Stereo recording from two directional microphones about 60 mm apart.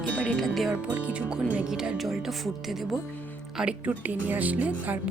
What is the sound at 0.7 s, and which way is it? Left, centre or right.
Speech, right.